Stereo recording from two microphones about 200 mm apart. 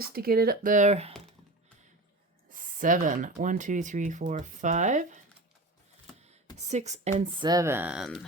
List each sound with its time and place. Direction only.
0.0 s speech: 50° right (ahead or behind); by 1.1 s 35° right (ahead or behind)
2.6 s speech: 40° right (ahead or behind)
6.6 s speech: 35° right (ahead or behind)
7.2 s speech: 20° right (ahead or behind); by 8.2 s centre (ahead or behind)